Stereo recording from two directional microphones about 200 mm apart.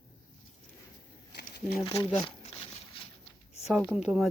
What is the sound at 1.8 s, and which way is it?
Speech, 30° left (ahead or behind).